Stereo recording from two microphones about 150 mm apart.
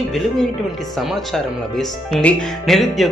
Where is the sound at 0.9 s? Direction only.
Centre (ahead or behind).